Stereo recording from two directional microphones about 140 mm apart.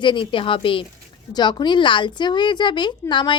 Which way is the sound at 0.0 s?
35° left (ahead or behind).